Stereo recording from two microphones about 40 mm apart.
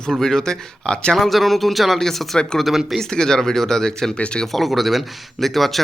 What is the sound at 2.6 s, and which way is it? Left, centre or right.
Speech, centre.